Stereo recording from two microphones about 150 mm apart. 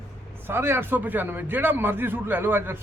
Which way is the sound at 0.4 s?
15° right (ahead or behind).